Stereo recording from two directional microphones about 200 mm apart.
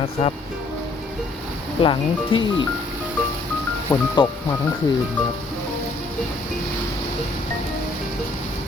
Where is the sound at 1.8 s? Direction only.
25° left (ahead or behind).